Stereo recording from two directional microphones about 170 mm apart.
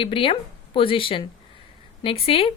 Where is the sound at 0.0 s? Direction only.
30° left (ahead or behind).